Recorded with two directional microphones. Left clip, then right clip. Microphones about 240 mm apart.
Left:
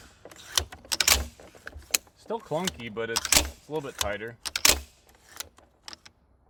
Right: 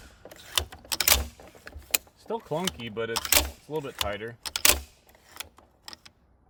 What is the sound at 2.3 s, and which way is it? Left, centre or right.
Speech, centre.